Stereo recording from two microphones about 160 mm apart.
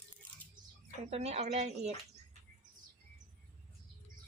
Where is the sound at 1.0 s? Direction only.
40° right (ahead or behind).